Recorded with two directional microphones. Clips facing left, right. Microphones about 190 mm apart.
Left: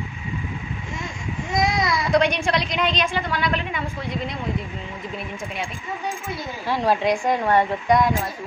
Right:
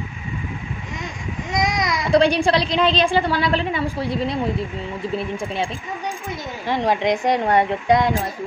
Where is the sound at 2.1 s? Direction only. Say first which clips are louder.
Right 5 dB; 30° right (ahead or behind).